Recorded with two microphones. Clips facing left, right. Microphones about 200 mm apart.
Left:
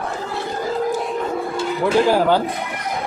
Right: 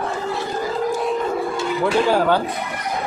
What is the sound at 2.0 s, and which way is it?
Speech, 10° left (ahead or behind).